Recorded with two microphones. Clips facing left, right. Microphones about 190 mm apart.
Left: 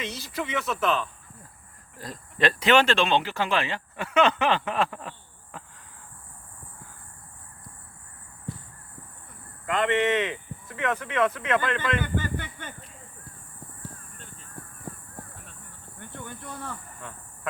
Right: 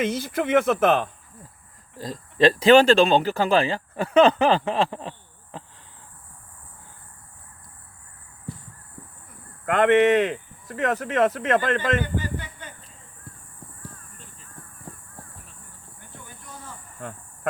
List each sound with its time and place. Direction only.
0.0 s speech: 50° right (ahead or behind)
2.0 s speech: 30° right (ahead or behind)
9.6 s speech: 60° right (ahead or behind); by 12.0 s 45° right (ahead or behind)
12.1 s a sound: 55° left (ahead or behind)
16.0 s a sound: 60° left (ahead or behind)
17.0 s cricket: 45° right (ahead or behind)